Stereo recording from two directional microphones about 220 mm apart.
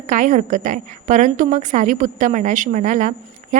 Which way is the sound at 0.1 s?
35° right (ahead or behind).